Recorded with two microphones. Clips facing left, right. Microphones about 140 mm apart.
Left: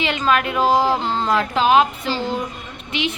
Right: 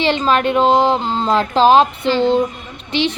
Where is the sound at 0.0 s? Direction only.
30° right (ahead or behind).